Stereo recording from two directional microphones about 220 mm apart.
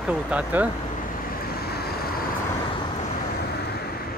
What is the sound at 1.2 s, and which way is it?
Vehicle, 45° left (ahead or behind).